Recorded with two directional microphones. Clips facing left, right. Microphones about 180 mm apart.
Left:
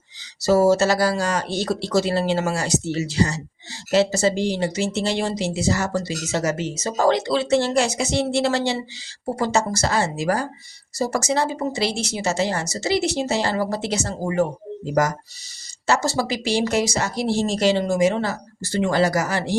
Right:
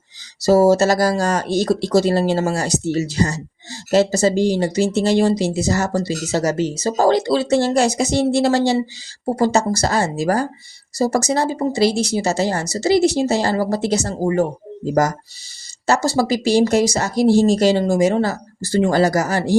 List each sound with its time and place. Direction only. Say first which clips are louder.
0.4 s speech: right 3 dB; 40° right (ahead or behind)
15.9 s speech: right 4 dB; 40° right (ahead or behind)